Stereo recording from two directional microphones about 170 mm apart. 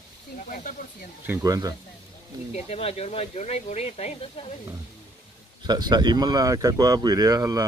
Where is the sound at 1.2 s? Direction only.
10° right (ahead or behind).